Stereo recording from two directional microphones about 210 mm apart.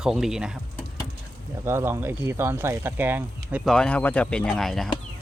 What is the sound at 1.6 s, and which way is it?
Speech, 10° right (ahead or behind).